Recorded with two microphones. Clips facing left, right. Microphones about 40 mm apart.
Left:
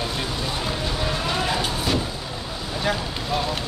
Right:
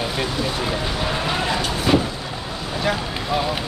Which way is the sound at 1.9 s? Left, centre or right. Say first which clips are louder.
Right 8 dB; right.